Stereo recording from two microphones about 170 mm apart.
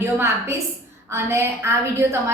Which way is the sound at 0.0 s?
15° right (ahead or behind).